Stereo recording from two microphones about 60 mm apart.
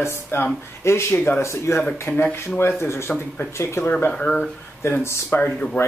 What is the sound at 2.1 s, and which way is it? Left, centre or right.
Speech, left.